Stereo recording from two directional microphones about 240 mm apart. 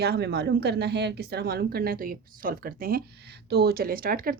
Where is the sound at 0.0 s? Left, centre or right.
Right.